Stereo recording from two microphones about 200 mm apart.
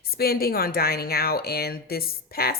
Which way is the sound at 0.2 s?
50° left (ahead or behind).